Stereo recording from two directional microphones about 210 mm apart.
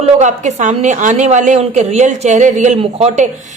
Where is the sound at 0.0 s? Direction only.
35° right (ahead or behind).